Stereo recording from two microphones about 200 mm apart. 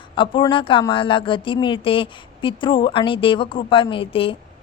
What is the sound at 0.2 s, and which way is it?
A woman's voice, 25° left (ahead or behind).